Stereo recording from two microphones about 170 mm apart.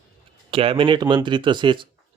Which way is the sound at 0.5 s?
30° right (ahead or behind).